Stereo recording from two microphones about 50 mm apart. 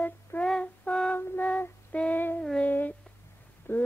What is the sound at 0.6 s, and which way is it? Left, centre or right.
Music, left.